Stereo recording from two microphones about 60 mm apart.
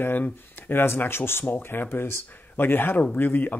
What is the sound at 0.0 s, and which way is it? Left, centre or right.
Speech, left.